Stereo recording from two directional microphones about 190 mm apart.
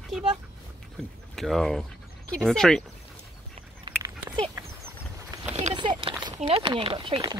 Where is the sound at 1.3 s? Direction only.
Centre (ahead or behind).